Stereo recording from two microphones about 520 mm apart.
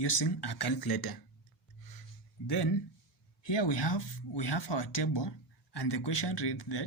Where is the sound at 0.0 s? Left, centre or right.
Left.